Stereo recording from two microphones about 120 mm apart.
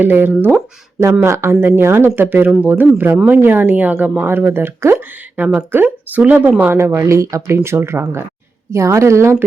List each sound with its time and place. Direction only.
0.0 s speech: 15° right (ahead or behind)